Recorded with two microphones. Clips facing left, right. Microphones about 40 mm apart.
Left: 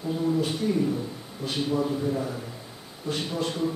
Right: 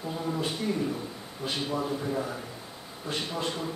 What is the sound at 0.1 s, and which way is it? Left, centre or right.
A man's voice, centre.